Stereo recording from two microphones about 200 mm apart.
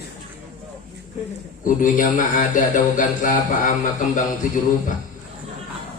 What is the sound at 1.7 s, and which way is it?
Speech, 40° left (ahead or behind).